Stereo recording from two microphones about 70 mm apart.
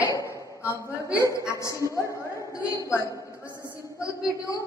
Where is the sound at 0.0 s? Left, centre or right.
Left.